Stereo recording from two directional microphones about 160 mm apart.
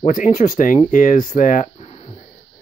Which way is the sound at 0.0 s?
50° left (ahead or behind).